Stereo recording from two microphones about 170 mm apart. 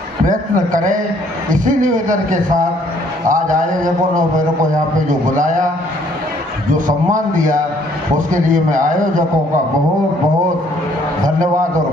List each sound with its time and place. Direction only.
0.3 s a man's voice: 50° right (ahead or behind)
5.4 s a man's voice: 50° right (ahead or behind)
6.7 s a man's voice: 50° right (ahead or behind)